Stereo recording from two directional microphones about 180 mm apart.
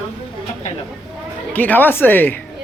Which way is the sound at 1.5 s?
10° left (ahead or behind).